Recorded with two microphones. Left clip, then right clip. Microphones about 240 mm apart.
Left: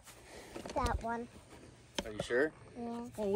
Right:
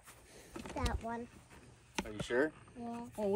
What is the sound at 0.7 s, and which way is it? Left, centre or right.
Speech, centre.